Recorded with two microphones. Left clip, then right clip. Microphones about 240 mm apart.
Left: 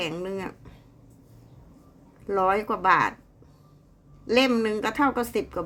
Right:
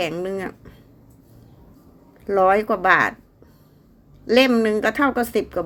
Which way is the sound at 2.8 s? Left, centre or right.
Centre.